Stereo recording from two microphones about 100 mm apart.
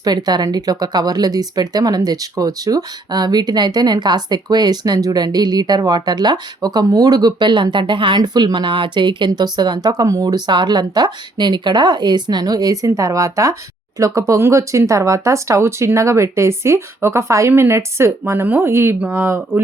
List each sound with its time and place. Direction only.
0.0 s speech: 40° right (ahead or behind); by 19.6 s 25° right (ahead or behind)